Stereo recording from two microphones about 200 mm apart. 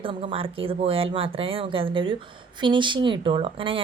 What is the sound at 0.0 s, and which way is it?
Speech, 25° right (ahead or behind).